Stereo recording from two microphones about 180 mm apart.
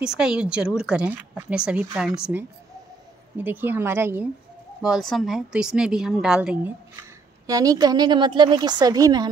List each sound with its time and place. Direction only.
0.0 s speech: 5° right (ahead or behind)
4.8 s a woman's voice: centre (ahead or behind); by 9.3 s 20° right (ahead or behind)